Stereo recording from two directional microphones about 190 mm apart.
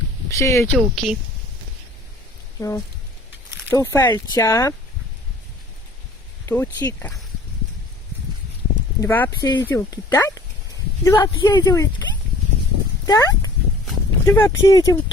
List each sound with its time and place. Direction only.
0.3 s speech: 15° left (ahead or behind)
0.8 s speech: centre (ahead or behind)
2.6 s speech: 15° left (ahead or behind)
6.4 s speech: 10° left (ahead or behind)
9.0 s speech: 10° left (ahead or behind)